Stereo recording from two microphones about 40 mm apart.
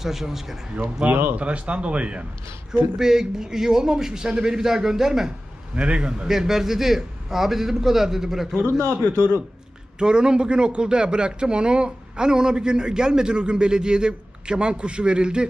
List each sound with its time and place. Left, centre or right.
0.0 s a man's voice: centre
1.3 s speech: right
3.0 s a man's voice: centre
5.8 s a man's voice: right
6.2 s a man's voice: centre
8.9 s a man's voice: right
9.9 s a man's voice: right